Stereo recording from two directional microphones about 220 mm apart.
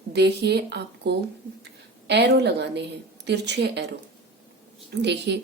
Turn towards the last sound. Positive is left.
turn(degrees=-50)  # may be behind; listen again after turning